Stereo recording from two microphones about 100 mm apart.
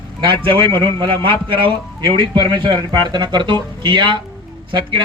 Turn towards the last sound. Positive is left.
turn(degrees=-50)  # may be behind; listen again after turning